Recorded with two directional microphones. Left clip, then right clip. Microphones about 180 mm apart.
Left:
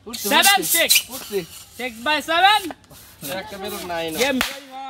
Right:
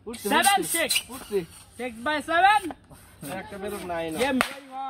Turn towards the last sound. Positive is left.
turn(degrees=5)  # may be behind; listen again after turning